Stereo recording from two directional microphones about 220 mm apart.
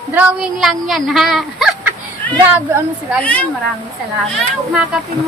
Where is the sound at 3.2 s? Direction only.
5° left (ahead or behind).